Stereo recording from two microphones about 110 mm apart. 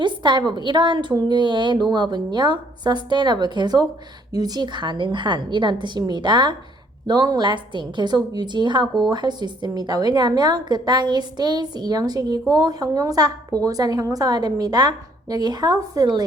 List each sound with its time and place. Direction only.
0.0 s a woman's voice: 45° right (ahead or behind)